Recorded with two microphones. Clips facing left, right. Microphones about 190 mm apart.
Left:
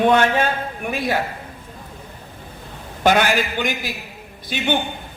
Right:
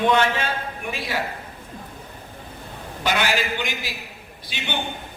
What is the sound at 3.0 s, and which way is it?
Speech, 50° left (ahead or behind).